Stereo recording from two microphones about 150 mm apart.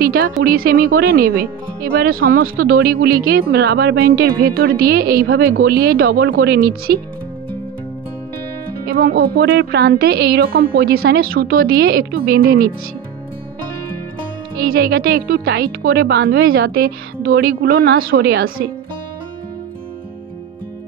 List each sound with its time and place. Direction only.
0.0 s speech: 85° right
8.8 s speech: 90° right
14.7 s speech: 85° right